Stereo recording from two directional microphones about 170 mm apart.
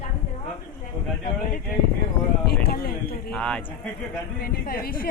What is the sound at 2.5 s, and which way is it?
Speech, 65° left (ahead or behind).